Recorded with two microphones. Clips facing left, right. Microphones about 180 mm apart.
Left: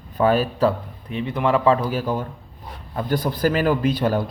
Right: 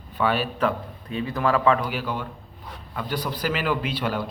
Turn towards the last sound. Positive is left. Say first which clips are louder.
# left 6 dB
turn(degrees=45)  # may be behind; listen again after turning